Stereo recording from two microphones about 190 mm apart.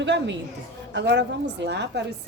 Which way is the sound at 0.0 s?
70° right (ahead or behind).